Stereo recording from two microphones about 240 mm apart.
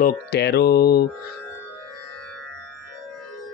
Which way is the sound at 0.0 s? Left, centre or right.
Left.